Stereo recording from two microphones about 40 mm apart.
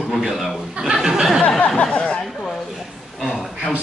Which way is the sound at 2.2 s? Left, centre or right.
Centre.